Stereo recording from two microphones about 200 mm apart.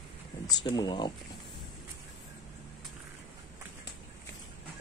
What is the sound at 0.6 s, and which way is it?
Speech, 20° left (ahead or behind).